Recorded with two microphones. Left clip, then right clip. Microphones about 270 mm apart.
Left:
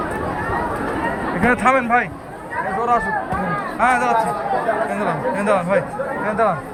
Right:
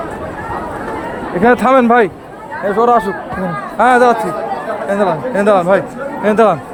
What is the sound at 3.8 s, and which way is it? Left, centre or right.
Speech, right.